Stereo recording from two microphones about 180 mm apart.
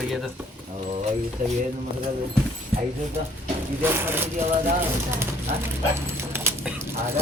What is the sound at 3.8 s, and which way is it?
Speech, 10° right (ahead or behind).